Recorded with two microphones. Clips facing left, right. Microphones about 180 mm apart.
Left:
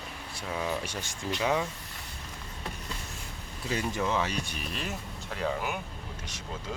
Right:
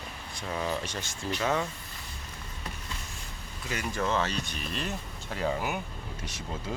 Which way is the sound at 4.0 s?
10° left (ahead or behind).